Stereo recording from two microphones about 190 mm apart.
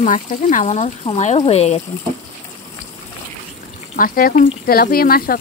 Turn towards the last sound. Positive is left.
turn(degrees=50)  # may be behind; listen again after turning